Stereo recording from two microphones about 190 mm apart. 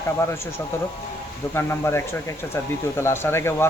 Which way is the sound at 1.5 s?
10° left (ahead or behind).